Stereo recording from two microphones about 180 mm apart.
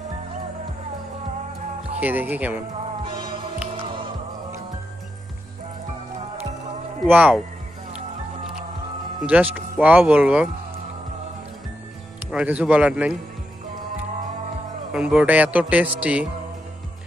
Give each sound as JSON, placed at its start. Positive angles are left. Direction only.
{"t": 2.0, "sound": "a man's voice", "side_deg": -10}
{"t": 3.2, "sound": "music", "side_deg": -25}
{"t": 7.1, "sound": "a man's voice", "side_deg": -10}
{"t": 9.2, "sound": "a man's voice", "side_deg": -10}
{"t": 12.3, "sound": "a man's voice", "side_deg": -5}
{"t": 14.9, "sound": "a man's voice", "side_deg": -5}